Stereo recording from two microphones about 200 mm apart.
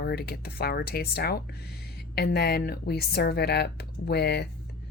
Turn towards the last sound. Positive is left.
turn(degrees=55)  # may be behind; listen again after turning